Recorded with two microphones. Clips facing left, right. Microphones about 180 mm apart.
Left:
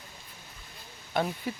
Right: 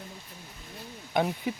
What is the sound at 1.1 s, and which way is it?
Speech, 10° right (ahead or behind).